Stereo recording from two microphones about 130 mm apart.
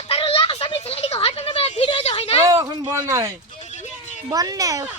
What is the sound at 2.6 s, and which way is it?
Speech, 40° right (ahead or behind).